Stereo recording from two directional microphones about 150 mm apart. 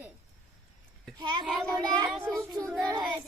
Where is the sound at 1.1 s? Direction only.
30° right (ahead or behind).